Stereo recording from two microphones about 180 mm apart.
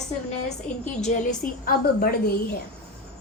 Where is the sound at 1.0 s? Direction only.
45° left (ahead or behind).